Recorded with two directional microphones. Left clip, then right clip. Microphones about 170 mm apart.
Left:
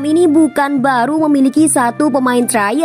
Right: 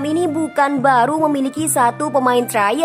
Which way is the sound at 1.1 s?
35° left (ahead or behind).